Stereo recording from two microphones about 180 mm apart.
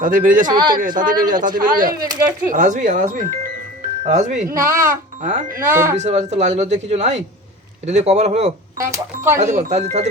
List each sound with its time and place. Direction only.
0.0 s speech: 50° right (ahead or behind)
4.4 s speech: 15° right (ahead or behind)
5.2 s speech: 40° right (ahead or behind)
5.6 s speech: 15° right (ahead or behind)
6.0 s speech: 40° right (ahead or behind)
8.8 s speech: 15° right (ahead or behind)
9.4 s speech: 40° right (ahead or behind)